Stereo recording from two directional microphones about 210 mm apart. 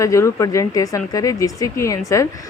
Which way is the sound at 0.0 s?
15° left (ahead or behind).